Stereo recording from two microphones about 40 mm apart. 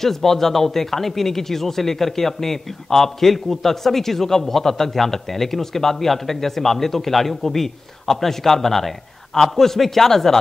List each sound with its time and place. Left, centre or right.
0.0 s speech: centre